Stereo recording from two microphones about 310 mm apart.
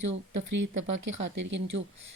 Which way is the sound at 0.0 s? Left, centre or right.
Right.